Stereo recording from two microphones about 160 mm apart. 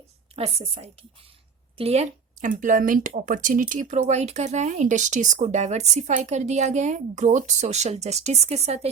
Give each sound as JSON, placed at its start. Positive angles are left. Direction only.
{"t": 0.3, "sound": "a woman's voice", "side_deg": -40}